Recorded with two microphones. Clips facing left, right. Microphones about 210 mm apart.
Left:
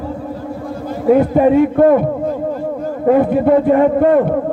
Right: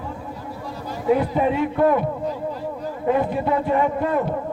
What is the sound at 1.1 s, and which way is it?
A man's voice, 50° left (ahead or behind).